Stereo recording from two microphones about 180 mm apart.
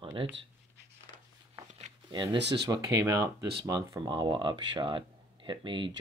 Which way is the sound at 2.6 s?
20° right (ahead or behind).